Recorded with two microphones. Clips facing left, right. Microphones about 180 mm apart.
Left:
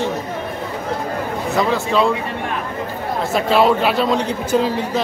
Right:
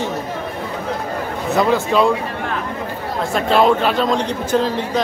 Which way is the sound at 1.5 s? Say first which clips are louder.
Right 2 dB; centre (ahead or behind).